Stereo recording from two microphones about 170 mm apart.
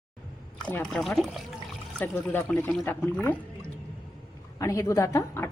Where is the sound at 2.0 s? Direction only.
10° left (ahead or behind).